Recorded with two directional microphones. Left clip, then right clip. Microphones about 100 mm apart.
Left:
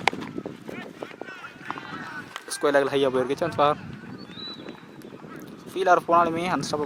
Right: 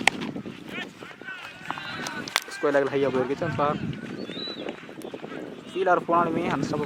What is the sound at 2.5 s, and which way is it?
A man's voice, 20° left (ahead or behind).